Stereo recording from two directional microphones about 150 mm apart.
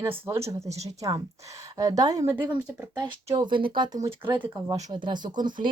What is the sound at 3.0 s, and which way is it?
Speech, 30° right (ahead or behind).